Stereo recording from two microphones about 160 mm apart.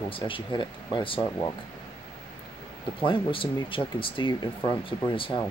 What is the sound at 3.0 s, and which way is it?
Speech, 35° left (ahead or behind).